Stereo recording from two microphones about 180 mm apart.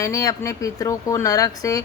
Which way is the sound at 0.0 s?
20° left (ahead or behind).